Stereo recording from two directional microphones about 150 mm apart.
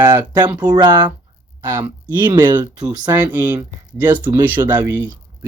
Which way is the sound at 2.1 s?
30° right (ahead or behind).